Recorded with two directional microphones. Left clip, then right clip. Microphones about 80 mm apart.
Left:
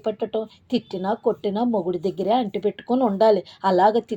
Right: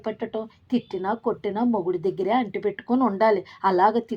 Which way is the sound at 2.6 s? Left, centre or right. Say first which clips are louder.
Left 2 dB; left.